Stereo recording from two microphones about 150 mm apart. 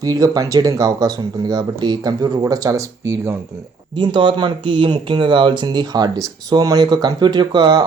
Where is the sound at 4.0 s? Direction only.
30° right (ahead or behind).